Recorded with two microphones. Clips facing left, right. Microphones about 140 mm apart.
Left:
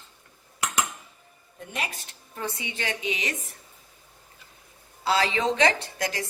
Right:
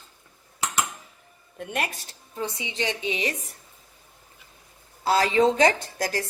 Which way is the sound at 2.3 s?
15° right (ahead or behind).